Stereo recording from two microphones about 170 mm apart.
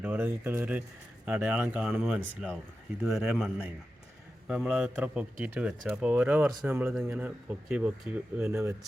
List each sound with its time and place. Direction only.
0.0 s a man's voice: 10° right (ahead or behind)